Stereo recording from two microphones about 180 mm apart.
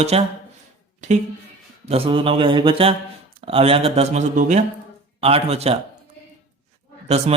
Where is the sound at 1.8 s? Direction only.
35° right (ahead or behind).